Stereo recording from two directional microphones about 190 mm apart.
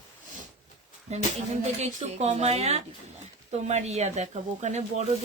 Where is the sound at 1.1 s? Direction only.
35° right (ahead or behind).